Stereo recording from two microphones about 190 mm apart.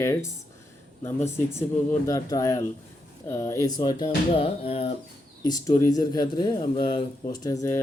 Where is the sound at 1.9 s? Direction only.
15° left (ahead or behind).